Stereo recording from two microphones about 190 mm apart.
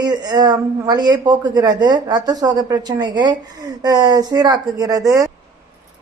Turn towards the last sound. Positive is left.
turn(degrees=-20)  # may be behind; listen again after turning